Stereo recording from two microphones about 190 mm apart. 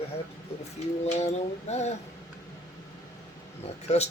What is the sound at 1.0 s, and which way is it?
Speech, 35° left (ahead or behind).